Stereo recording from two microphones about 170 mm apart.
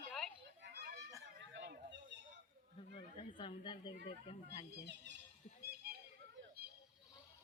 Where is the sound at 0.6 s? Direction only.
70° right (ahead or behind).